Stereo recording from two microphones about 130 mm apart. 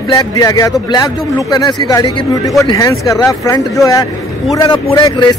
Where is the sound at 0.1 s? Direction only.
30° left (ahead or behind).